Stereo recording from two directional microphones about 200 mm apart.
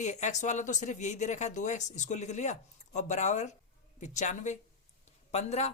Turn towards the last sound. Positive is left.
turn(degrees=35)  # may be behind; listen again after turning